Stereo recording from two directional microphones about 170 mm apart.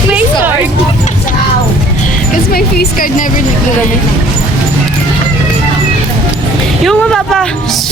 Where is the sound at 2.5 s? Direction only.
60° left (ahead or behind).